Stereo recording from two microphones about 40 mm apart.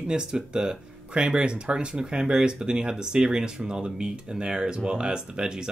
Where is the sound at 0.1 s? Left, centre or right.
Right.